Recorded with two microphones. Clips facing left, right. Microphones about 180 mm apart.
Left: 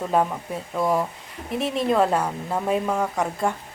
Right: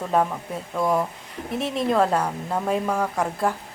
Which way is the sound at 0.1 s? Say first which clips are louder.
Right 1 dB; 5° left (ahead or behind).